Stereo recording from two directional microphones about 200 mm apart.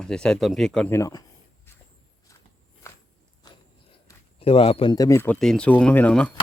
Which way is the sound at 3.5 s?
20° left (ahead or behind).